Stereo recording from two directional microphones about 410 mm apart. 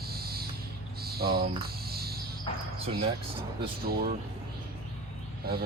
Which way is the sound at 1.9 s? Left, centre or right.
Right.